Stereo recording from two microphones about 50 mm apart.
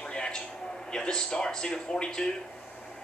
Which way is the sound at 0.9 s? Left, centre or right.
Centre.